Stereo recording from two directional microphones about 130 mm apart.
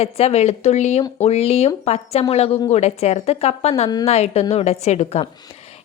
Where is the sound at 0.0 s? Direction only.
50° left (ahead or behind).